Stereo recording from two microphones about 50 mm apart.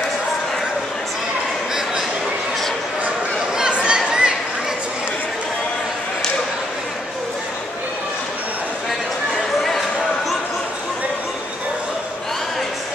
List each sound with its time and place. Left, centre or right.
3.5 s chatter: centre